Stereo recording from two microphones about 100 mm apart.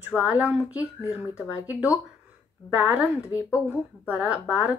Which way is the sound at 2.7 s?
15° right (ahead or behind).